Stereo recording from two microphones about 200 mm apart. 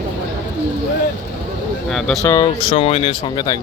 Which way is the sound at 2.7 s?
30° left (ahead or behind).